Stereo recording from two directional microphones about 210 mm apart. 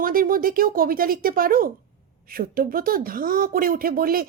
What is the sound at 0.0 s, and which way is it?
Speech, 40° right (ahead or behind).